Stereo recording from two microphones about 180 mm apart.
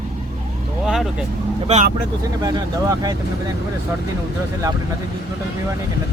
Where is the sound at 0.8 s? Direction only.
5° right (ahead or behind).